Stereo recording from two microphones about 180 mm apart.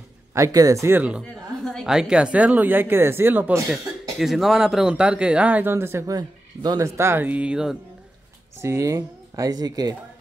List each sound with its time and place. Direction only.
0.3 s speech: 20° right (ahead or behind)
1.2 s speech: 5° left (ahead or behind)
4.2 s speech: centre (ahead or behind)
8.5 s speech: 15° right (ahead or behind)